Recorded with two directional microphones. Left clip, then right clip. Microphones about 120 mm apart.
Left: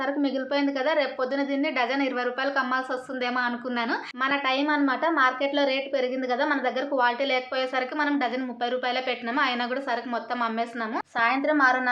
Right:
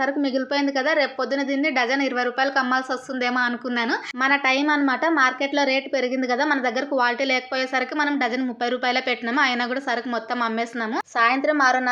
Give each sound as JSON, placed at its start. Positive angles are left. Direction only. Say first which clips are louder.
{"t": 0.0, "sound": "a woman's voice", "louder": "right 4 dB", "side_deg": -40}